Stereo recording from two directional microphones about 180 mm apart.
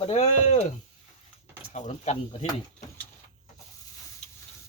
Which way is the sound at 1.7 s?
40° left (ahead or behind).